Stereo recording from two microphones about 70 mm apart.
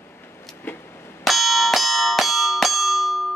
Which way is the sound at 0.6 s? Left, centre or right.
Left.